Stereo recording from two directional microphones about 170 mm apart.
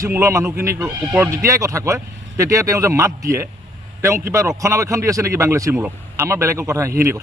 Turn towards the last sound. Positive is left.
turn(degrees=-20)  # may be behind; listen again after turning